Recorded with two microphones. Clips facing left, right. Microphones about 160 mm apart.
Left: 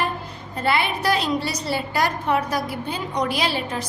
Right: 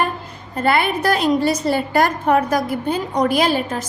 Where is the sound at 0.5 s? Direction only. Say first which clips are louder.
Right 5 dB; 50° right (ahead or behind).